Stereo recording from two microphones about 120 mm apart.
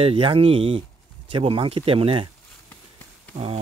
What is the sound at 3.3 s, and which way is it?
Speech, 60° right (ahead or behind).